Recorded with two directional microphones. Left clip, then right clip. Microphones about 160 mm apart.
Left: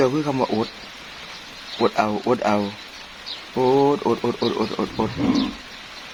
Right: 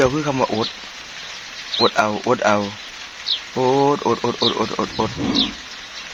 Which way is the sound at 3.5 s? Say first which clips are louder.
Even; 25° right (ahead or behind).